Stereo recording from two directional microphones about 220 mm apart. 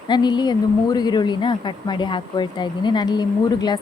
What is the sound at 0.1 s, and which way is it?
A woman's voice, 20° left (ahead or behind).